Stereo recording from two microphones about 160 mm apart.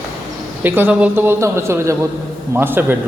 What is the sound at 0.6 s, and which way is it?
A man's voice, 10° right (ahead or behind).